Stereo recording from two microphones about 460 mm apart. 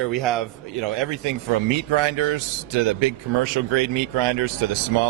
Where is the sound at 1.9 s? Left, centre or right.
Right.